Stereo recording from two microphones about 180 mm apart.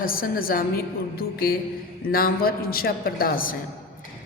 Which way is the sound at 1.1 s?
55° left (ahead or behind).